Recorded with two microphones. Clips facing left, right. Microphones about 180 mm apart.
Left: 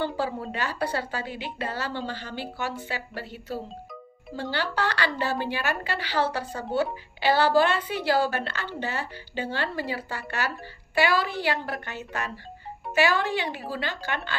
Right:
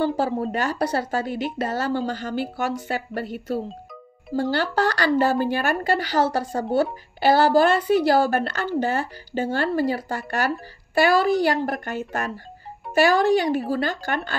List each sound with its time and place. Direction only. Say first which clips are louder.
0.0 s a woman's voice: right 6 dB; 40° right (ahead or behind)